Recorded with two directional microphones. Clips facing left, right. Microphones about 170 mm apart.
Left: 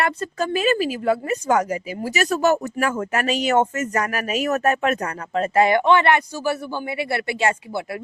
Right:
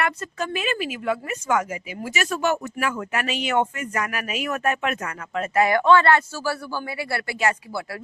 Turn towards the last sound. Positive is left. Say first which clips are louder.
# left 3 dB
turn(degrees=25)  # may be behind; listen again after turning